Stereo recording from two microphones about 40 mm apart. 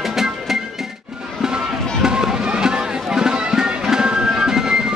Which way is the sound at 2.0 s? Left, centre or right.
Centre.